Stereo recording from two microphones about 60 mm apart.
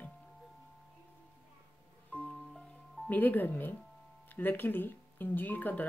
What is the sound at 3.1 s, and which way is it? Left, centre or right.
Speech, left.